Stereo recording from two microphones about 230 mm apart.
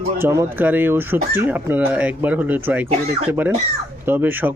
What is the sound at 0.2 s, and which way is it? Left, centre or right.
Speech, centre.